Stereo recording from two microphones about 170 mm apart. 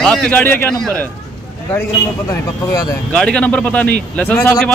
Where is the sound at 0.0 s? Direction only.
5° left (ahead or behind).